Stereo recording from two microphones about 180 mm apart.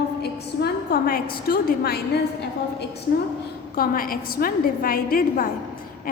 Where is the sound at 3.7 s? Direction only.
55° left (ahead or behind).